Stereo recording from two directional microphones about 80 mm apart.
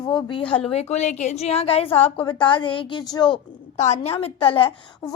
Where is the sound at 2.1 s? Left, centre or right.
Left.